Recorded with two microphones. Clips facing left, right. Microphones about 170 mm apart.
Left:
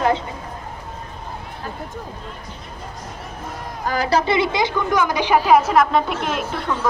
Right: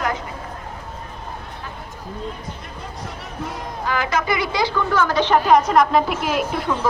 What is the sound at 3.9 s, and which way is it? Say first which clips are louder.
A woman's voice: left 3 dB; 35° left (ahead or behind).